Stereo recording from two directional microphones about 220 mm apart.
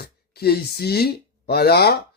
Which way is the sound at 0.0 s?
45° left (ahead or behind).